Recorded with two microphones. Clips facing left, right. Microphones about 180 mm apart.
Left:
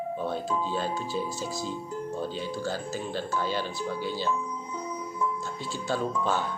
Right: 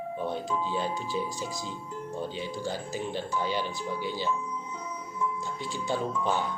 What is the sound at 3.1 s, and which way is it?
Speech, 15° right (ahead or behind).